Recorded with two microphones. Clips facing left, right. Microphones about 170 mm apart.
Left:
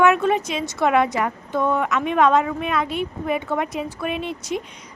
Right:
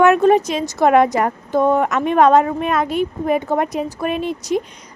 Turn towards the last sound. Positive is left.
turn(degrees=-40)  # may be behind; listen again after turning